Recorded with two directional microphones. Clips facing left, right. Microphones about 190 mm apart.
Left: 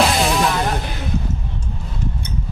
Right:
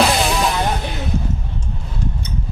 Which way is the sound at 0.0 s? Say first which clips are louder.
Even; centre (ahead or behind).